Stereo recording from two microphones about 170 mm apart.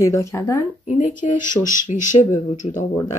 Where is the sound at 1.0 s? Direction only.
50° left (ahead or behind).